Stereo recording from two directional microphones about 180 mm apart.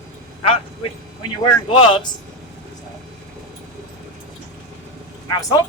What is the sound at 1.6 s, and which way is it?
Speech, 30° left (ahead or behind).